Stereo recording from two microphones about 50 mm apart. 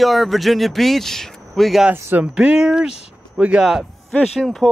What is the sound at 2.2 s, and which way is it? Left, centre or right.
Speech, centre.